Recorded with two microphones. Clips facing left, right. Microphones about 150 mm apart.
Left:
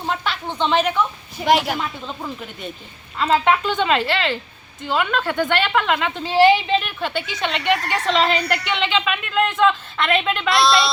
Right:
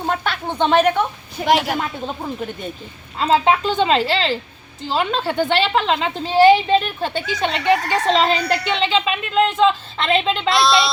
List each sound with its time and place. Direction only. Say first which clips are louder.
0.0 s speech: right 3 dB; 50° right (ahead or behind)
1.5 s a woman's voice: even; centre (ahead or behind)
1.8 s speech: right 3 dB; 45° right (ahead or behind)
3.2 s a woman's voice: right 1 dB; 30° right (ahead or behind)
10.5 s a woman's voice: even; centre (ahead or behind)